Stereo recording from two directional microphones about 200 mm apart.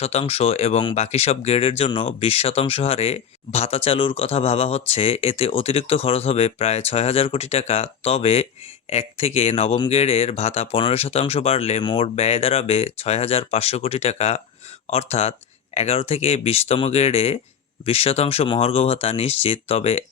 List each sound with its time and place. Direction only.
0.0 s speech: 30° left (ahead or behind)